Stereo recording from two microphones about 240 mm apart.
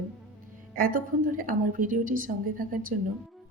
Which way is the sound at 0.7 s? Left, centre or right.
Right.